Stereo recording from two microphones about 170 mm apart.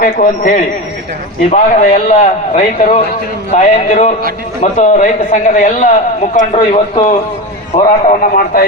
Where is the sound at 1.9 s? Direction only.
45° left (ahead or behind).